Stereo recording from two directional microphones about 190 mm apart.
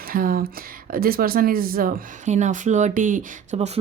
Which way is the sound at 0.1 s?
50° right (ahead or behind).